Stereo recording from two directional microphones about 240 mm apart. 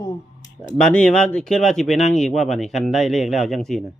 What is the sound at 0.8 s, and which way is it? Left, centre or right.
Speech, centre.